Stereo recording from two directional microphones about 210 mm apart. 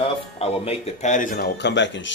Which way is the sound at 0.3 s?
30° left (ahead or behind).